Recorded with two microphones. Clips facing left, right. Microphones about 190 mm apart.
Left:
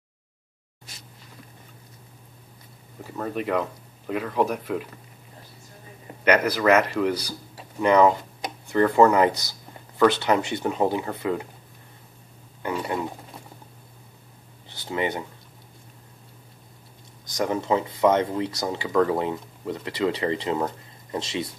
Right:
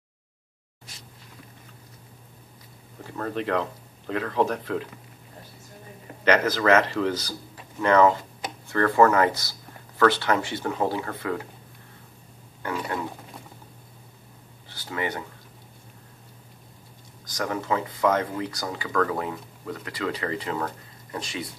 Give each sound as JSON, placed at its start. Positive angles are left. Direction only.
{"t": 3.0, "sound": "speech", "side_deg": 5}
{"t": 6.2, "sound": "speech", "side_deg": 10}
{"t": 12.6, "sound": "speech", "side_deg": 20}
{"t": 14.7, "sound": "speech", "side_deg": 20}
{"t": 17.4, "sound": "speech", "side_deg": 20}